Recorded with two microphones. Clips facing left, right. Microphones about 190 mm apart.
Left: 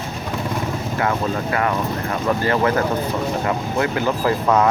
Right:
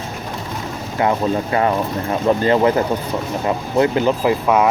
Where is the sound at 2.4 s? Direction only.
20° right (ahead or behind).